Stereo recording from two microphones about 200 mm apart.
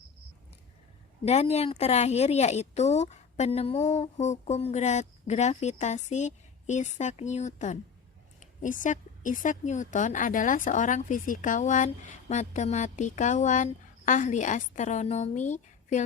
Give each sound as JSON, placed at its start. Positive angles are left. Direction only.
{"t": 1.2, "sound": "a woman's voice", "side_deg": 35}